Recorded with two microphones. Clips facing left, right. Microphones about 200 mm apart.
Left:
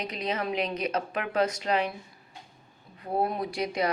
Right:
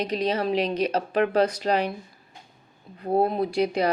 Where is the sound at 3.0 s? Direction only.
30° right (ahead or behind).